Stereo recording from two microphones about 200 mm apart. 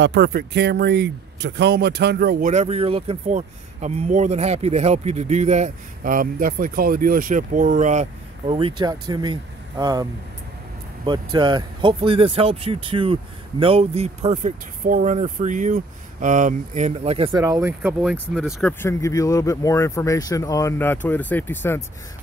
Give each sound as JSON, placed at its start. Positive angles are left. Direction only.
{"t": 0.0, "sound": "speech", "side_deg": -60}
{"t": 2.5, "sound": "speech", "side_deg": -30}
{"t": 11.1, "sound": "speech", "side_deg": -20}
{"t": 17.3, "sound": "speech", "side_deg": -15}
{"t": 18.7, "sound": "speech", "side_deg": 10}